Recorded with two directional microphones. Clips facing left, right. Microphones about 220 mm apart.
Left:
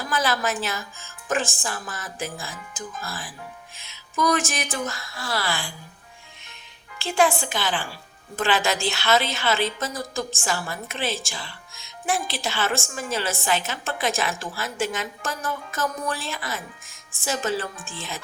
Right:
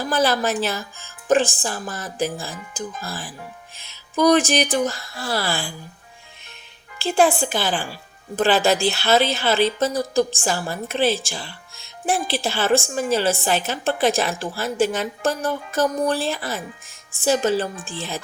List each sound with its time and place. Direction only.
0.1 s a woman's voice: 35° right (ahead or behind)
7.0 s a woman's voice: 35° right (ahead or behind)